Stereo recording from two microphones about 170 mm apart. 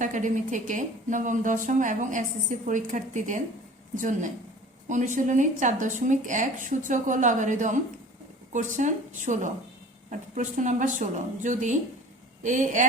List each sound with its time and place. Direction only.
0.0 s a woman's voice: 50° right (ahead or behind)